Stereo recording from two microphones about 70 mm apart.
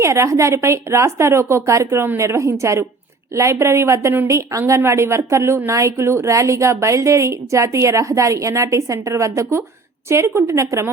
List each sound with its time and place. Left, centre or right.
0.0 s a woman's voice: right